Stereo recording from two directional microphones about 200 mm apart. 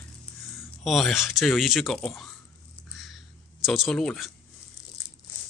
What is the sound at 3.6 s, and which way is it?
Speech, centre (ahead or behind).